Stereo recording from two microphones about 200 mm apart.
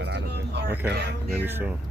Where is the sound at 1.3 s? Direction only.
10° right (ahead or behind).